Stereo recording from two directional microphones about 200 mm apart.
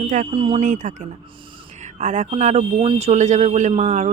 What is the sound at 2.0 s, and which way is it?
Speech, 35° right (ahead or behind).